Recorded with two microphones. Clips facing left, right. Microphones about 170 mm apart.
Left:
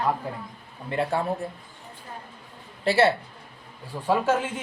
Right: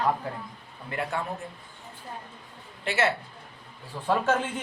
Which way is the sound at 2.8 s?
35° left (ahead or behind).